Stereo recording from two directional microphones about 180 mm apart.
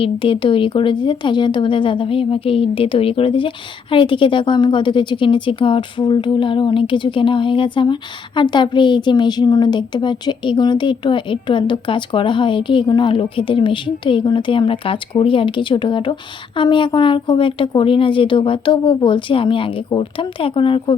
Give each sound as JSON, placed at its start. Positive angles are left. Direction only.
{"t": 0.0, "sound": "speech", "side_deg": 30}